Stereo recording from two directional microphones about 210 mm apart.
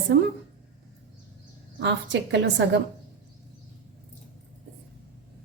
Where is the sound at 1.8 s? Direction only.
55° right (ahead or behind).